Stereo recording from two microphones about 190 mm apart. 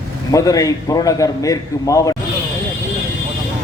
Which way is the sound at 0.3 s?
15° left (ahead or behind).